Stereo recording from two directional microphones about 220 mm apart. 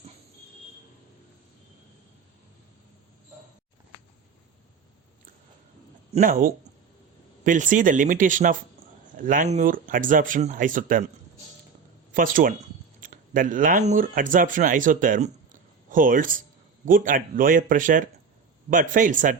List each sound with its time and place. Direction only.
6.1 s speech: 40° right (ahead or behind)
12.1 s speech: 40° right (ahead or behind)